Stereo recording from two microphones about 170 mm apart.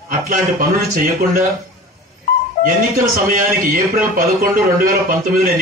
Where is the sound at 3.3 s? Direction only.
55° right (ahead or behind).